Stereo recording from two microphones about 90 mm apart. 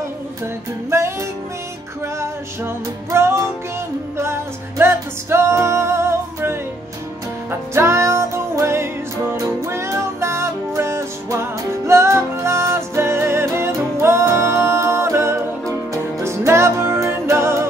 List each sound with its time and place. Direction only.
0.8 s music: 30° right (ahead or behind)
2.1 s music: 30° right (ahead or behind)
7.7 s music: 30° right (ahead or behind)